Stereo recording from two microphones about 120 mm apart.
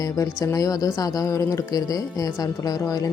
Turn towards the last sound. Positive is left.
turn(degrees=30)  # may be behind; listen again after turning